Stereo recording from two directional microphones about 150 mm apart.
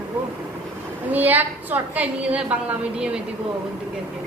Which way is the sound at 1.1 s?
10° right (ahead or behind).